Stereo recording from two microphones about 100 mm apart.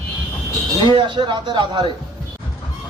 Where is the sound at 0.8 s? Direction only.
55° right (ahead or behind).